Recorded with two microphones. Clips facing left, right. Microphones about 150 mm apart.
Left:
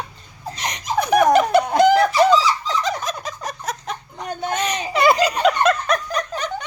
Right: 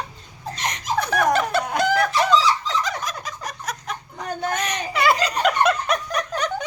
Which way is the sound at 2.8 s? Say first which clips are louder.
Left 4 dB; 25° left (ahead or behind).